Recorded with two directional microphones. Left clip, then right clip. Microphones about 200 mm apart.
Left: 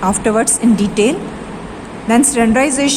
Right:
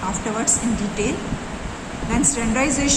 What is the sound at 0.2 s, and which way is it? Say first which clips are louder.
Speech: left 13 dB; 50° left (ahead or behind).